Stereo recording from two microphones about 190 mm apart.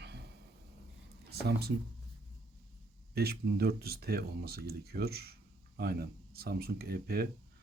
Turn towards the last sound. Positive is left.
turn(degrees=-55)  # may be behind; listen again after turning